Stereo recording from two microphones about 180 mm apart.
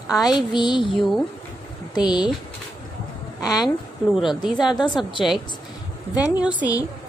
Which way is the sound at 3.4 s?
20° left (ahead or behind).